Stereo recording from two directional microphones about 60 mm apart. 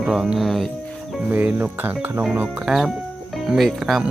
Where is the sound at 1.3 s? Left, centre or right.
Right.